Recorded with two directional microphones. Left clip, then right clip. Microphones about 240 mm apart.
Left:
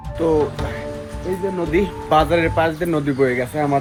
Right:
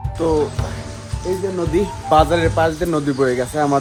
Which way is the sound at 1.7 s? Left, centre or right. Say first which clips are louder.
Right 1 dB; centre.